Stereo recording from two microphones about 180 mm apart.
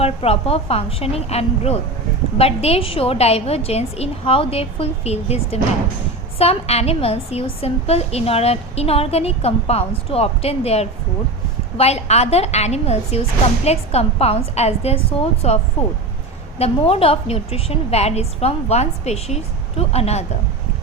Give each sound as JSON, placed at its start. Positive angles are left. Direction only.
{"t": 0.0, "sound": "a woman's voice", "side_deg": 35}